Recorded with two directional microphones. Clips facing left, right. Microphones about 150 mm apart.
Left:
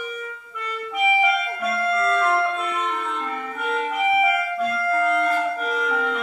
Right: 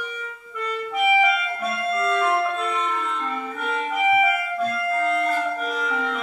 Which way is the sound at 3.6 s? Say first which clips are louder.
Left 2 dB; centre (ahead or behind).